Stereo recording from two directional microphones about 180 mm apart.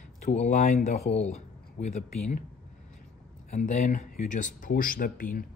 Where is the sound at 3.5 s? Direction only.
40° left (ahead or behind).